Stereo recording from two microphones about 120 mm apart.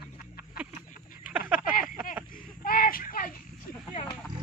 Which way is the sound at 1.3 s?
15° right (ahead or behind).